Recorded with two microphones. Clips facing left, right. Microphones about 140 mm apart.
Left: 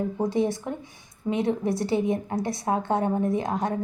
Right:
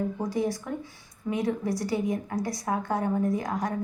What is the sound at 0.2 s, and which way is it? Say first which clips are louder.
A woman's voice: left 4 dB; 25° left (ahead or behind).